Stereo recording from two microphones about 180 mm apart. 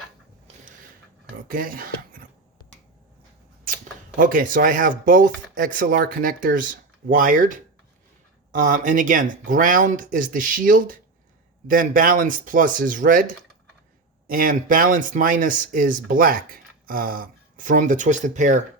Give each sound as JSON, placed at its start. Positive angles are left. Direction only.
{"t": 1.5, "sound": "a sound", "side_deg": -50}
{"t": 4.2, "sound": "speech", "side_deg": -50}
{"t": 14.3, "sound": "speech", "side_deg": -50}